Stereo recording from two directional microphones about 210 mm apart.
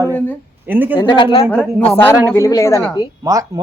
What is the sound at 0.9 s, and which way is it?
Speech, 20° left (ahead or behind).